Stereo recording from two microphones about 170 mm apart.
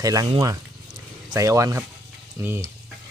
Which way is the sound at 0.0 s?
20° right (ahead or behind).